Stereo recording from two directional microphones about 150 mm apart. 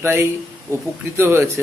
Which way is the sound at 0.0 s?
15° right (ahead or behind).